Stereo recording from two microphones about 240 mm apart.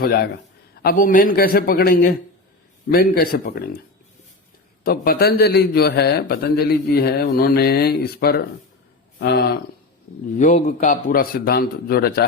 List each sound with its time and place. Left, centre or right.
0.0 s a man's voice: left
4.8 s a man's voice: left
10.3 s a man's voice: left